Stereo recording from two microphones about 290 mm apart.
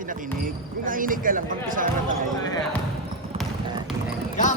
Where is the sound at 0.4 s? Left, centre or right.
Right.